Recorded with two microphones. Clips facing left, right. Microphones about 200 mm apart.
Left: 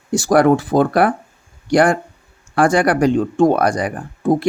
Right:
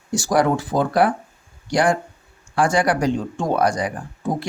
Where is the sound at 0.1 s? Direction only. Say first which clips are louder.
Left 6 dB; 60° left (ahead or behind).